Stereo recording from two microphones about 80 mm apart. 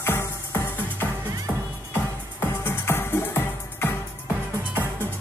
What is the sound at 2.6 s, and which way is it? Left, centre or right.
Music, left.